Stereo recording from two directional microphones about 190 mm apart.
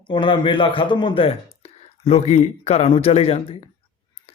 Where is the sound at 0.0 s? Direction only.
25° left (ahead or behind).